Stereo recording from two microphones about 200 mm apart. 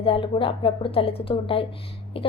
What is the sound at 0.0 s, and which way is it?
A woman's voice, 25° left (ahead or behind).